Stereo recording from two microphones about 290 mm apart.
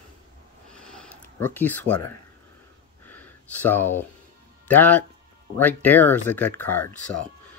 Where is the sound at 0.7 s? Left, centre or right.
Centre.